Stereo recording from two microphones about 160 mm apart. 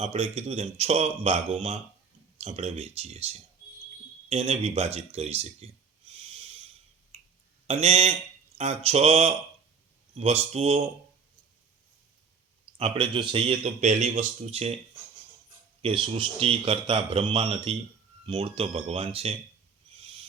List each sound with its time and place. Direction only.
0.0 s speech: 40° right (ahead or behind)
7.1 s a sound: 40° right (ahead or behind)
7.7 s speech: 40° right (ahead or behind)
12.7 s speech: 35° right (ahead or behind)
15.8 s speech: 35° right (ahead or behind)